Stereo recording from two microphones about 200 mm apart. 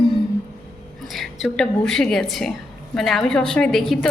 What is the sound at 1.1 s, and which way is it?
A woman's voice, centre (ahead or behind).